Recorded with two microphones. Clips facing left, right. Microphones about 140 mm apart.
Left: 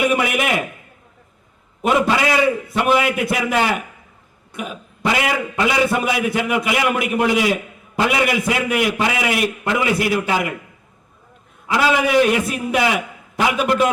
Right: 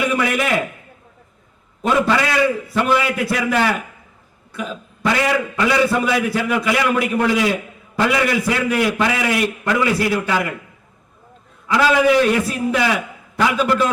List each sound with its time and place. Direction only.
0.0 s a man's voice: 20° left (ahead or behind)
1.8 s a man's voice: 20° left (ahead or behind)
11.7 s a man's voice: 20° left (ahead or behind)